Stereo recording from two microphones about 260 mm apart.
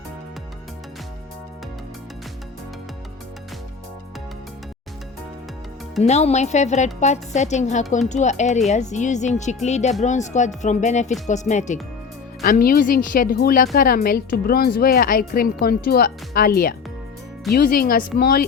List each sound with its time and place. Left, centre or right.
6.0 s a woman's voice: left